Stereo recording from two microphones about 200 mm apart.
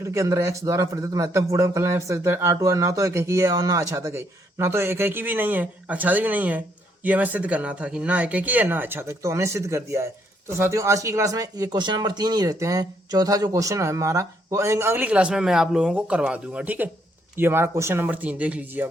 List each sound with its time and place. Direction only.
0.0 s a man's voice: 15° right (ahead or behind)